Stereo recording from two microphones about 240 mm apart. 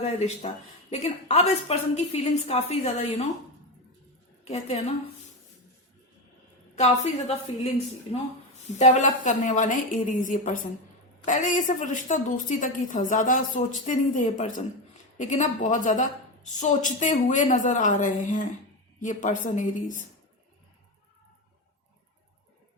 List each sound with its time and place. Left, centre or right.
0.0 s speech: left
4.4 s speech: left
6.7 s speech: left
8.7 s a woman's voice: left